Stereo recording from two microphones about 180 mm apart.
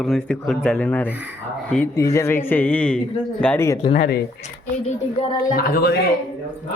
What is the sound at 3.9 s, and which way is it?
Speech, 60° left (ahead or behind).